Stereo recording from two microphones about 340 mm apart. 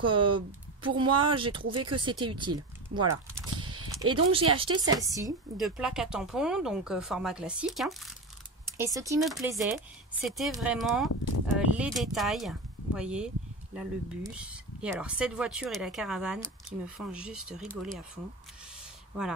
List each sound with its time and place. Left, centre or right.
0.1 s speech: centre
1.7 s speech: right
2.0 s speech: centre
4.1 s speech: centre